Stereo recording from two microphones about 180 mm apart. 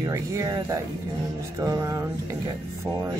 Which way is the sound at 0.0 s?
15° right (ahead or behind).